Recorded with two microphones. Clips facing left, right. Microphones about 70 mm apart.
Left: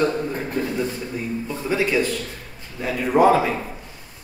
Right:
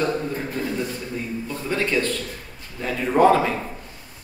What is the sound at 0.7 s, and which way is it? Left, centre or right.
A man's voice, centre.